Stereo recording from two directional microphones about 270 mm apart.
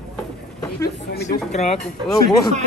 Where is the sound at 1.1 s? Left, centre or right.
Left.